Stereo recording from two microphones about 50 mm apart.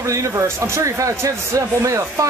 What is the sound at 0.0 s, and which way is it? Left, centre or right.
Speech, right.